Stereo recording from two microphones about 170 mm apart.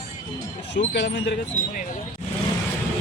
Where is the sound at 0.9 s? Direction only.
90° left.